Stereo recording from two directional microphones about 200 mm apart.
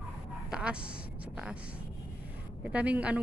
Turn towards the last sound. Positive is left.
turn(degrees=-5)  # may be behind; listen again after turning